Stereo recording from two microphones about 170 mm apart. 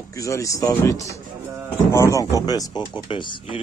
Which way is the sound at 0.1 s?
20° left (ahead or behind).